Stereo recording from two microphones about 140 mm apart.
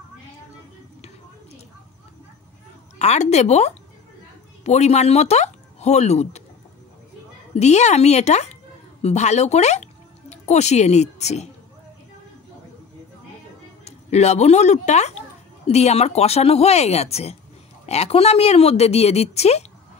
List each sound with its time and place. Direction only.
3.0 s a woman's voice: 50° left (ahead or behind)
7.5 s a woman's voice: 55° left (ahead or behind)
13.8 s a woman's voice: 50° left (ahead or behind)